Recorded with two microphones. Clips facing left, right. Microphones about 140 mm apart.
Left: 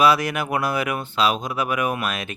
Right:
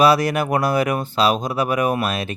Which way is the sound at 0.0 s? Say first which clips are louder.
Right 3 dB; 40° right (ahead or behind).